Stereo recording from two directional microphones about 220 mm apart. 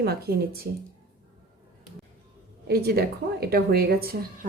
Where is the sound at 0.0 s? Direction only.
45° right (ahead or behind).